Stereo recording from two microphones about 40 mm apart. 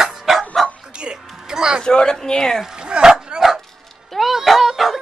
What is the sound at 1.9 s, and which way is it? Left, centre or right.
Speech, centre.